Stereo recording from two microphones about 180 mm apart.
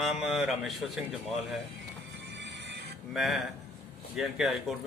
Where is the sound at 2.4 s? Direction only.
75° right (ahead or behind).